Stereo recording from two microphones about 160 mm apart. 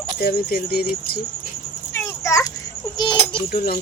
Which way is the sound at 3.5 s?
55° left (ahead or behind).